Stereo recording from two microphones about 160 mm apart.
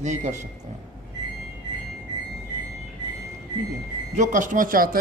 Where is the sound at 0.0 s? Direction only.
50° right (ahead or behind).